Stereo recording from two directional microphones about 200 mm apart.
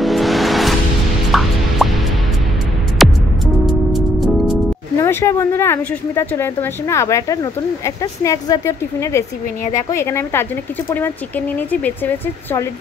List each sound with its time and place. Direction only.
0.0 s music: centre (ahead or behind)
3.0 s music: centre (ahead or behind)
4.9 s speech: 15° left (ahead or behind)